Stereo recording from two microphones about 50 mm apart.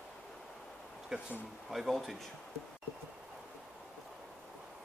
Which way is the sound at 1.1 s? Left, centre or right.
Centre.